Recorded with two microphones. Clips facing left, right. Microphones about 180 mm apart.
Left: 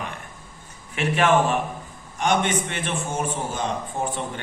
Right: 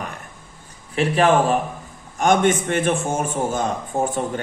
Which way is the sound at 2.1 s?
45° right (ahead or behind).